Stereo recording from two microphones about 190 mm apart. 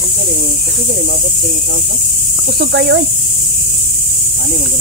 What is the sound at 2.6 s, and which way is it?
Speech, 60° right (ahead or behind).